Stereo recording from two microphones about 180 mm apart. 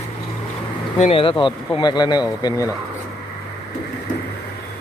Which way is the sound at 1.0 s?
30° left (ahead or behind).